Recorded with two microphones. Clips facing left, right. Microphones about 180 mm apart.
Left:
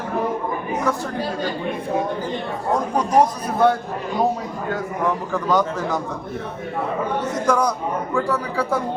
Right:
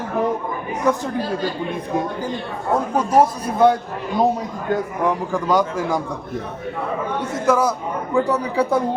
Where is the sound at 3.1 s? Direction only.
10° right (ahead or behind).